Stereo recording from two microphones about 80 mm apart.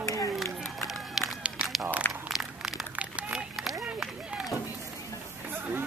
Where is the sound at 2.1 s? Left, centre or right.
Centre.